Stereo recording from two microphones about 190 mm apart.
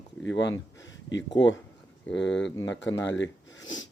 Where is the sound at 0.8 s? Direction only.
75° left (ahead or behind).